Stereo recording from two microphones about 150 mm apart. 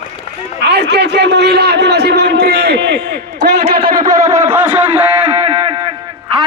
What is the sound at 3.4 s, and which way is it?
Speech, 55° right (ahead or behind).